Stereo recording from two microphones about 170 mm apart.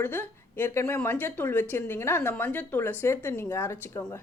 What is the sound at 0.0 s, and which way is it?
Speech, 10° left (ahead or behind).